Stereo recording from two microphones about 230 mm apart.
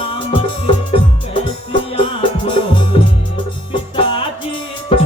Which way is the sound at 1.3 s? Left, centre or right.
Left.